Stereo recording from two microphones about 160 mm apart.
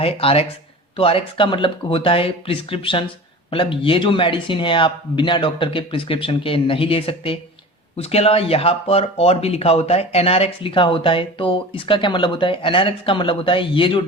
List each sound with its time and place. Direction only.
0.0 s speech: 35° left (ahead or behind)